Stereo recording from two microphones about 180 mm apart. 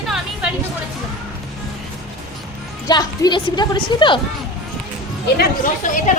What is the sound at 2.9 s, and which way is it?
A woman's voice, 25° left (ahead or behind).